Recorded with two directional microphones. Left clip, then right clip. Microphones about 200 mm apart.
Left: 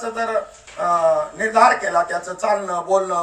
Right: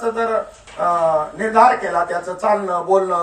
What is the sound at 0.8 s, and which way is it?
Speech, 20° left (ahead or behind).